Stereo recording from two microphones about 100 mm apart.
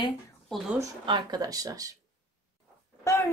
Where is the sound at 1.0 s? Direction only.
45° right (ahead or behind).